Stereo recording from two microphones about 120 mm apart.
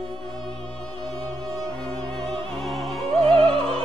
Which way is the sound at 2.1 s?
40° right (ahead or behind).